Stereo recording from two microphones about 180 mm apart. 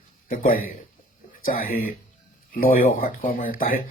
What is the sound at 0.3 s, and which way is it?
Speech, 50° left (ahead or behind).